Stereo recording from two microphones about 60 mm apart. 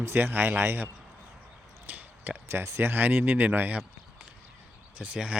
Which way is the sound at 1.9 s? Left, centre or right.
Right.